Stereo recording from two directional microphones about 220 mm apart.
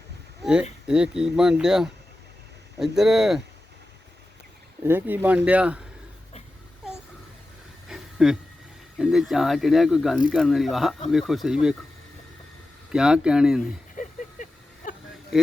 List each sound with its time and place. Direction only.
0.4 s speech: 5° right (ahead or behind)
4.8 s speech: 10° right (ahead or behind)
7.9 s a sound: centre (ahead or behind)
9.0 s speech: centre (ahead or behind)
12.9 s speech: 5° right (ahead or behind)
13.9 s a sound: 35° left (ahead or behind)